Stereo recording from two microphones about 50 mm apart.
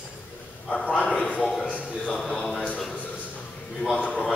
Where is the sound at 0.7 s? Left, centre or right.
Left.